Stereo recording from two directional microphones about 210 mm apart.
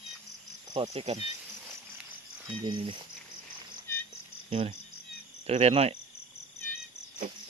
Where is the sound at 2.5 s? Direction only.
20° right (ahead or behind).